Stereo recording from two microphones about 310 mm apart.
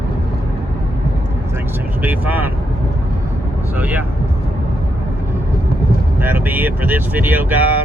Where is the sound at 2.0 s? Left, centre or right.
Centre.